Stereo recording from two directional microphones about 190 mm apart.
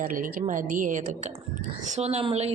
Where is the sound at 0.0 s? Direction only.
45° right (ahead or behind).